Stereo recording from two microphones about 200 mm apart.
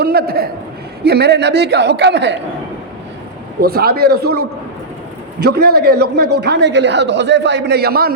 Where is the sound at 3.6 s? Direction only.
50° right (ahead or behind).